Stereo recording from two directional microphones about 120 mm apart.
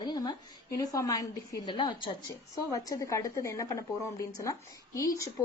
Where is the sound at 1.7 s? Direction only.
40° left (ahead or behind).